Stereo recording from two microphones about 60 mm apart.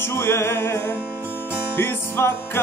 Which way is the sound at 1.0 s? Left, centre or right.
Right.